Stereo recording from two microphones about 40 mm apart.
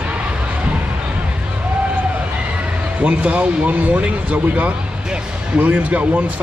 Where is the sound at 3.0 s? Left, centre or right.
Right.